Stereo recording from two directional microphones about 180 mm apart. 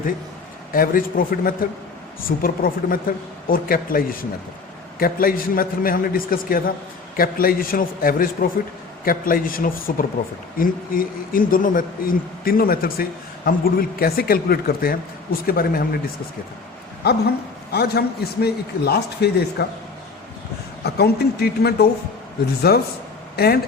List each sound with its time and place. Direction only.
0.7 s speech: 50° left (ahead or behind)
17.0 s speech: 65° left (ahead or behind)
20.8 s speech: 60° left (ahead or behind)